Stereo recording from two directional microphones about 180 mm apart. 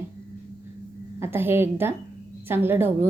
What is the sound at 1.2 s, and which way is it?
A woman's voice, 10° right (ahead or behind).